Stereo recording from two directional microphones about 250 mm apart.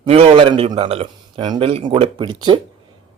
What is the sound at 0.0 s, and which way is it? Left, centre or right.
A man's voice, right.